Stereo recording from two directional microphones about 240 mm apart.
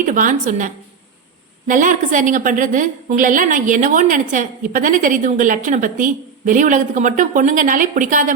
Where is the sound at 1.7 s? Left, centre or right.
Right.